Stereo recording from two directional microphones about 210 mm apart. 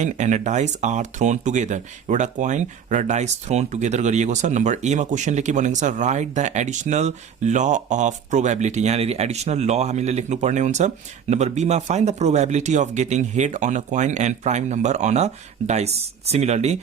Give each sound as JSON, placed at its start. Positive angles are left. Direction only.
{"t": 0.0, "sound": "speech", "side_deg": -35}